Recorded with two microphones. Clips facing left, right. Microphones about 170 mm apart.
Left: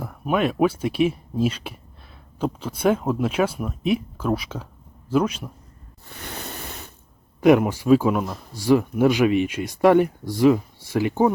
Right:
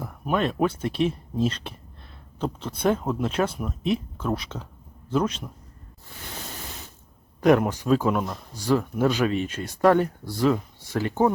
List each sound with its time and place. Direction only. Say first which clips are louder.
0.0 s speech: left 3 dB; 5° left (ahead or behind)
6.7 s ratchet: left 3 dB; 60° left (ahead or behind)
7.4 s speech: left 3 dB; 10° left (ahead or behind)